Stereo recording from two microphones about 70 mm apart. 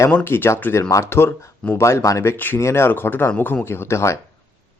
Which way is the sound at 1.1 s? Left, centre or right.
Left.